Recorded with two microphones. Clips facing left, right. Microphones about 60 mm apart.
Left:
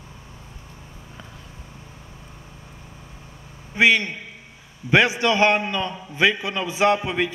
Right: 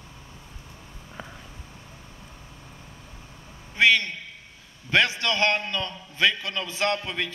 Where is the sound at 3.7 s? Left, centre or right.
Centre.